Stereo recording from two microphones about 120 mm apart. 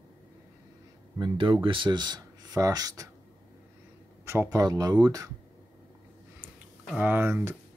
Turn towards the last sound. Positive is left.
turn(degrees=-20)  # may be behind; listen again after turning